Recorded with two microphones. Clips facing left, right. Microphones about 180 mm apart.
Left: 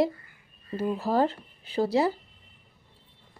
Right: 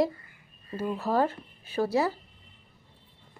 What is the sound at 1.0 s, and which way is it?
Speech, 35° left (ahead or behind).